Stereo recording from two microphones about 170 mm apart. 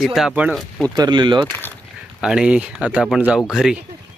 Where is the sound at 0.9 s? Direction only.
25° right (ahead or behind).